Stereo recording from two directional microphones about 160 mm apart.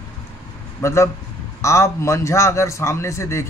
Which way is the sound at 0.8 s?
15° left (ahead or behind).